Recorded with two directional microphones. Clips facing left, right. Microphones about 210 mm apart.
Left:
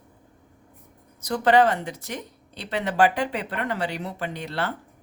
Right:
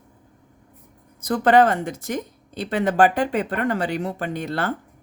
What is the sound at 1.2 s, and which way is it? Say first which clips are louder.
Speech: right 3 dB; 50° right (ahead or behind).